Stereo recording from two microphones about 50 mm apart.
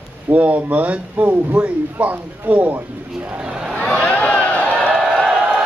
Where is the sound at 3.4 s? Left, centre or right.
Centre.